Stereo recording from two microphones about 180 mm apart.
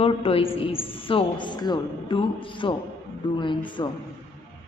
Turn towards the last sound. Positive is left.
turn(degrees=25)  # may be behind; listen again after turning